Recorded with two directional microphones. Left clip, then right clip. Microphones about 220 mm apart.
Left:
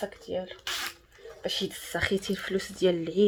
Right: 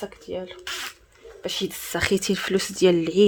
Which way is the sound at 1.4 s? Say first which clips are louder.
Right 3 dB; 40° right (ahead or behind).